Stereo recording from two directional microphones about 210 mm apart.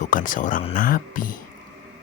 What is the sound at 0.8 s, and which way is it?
Speech, 40° left (ahead or behind).